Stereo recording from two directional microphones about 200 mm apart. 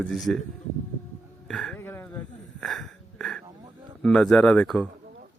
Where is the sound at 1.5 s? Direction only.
5° left (ahead or behind).